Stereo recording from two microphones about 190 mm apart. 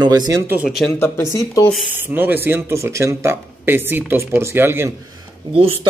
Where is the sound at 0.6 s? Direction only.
Centre (ahead or behind).